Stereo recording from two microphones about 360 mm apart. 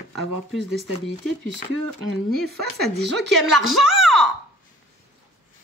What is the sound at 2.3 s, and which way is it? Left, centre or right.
Speech, right.